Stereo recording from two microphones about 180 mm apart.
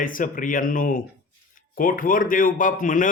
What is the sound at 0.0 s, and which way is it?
Speech, 50° left (ahead or behind).